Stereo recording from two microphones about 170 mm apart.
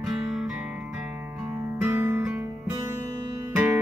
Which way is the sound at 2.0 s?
10° right (ahead or behind).